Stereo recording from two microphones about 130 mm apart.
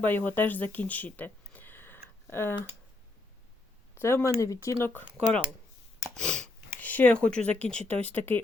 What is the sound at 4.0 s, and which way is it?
Speech, 20° left (ahead or behind).